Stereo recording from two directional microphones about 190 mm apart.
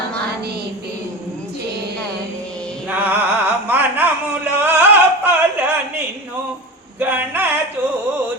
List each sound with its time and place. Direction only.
2.9 s music: 10° right (ahead or behind)
7.0 s male singing: 10° right (ahead or behind)